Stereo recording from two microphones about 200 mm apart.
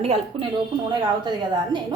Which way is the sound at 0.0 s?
30° right (ahead or behind).